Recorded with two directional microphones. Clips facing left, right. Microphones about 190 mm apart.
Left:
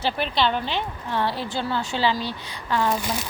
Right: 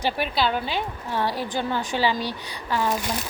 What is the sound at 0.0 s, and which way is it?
A woman's voice, 5° right (ahead or behind).